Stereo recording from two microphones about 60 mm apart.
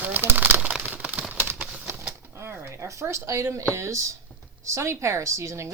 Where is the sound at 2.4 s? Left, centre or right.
Right.